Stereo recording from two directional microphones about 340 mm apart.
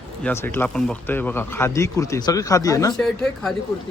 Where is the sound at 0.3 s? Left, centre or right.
Centre.